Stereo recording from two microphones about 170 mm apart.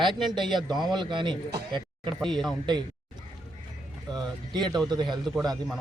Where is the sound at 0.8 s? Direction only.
25° right (ahead or behind).